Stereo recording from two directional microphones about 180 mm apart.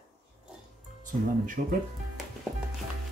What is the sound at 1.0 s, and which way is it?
Speech, 45° right (ahead or behind).